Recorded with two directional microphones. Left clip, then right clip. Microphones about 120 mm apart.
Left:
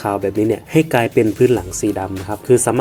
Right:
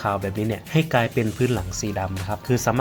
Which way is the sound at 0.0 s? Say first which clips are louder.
Left 7 dB; 40° left (ahead or behind).